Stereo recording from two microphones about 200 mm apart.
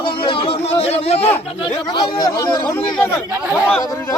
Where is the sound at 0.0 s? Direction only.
25° left (ahead or behind).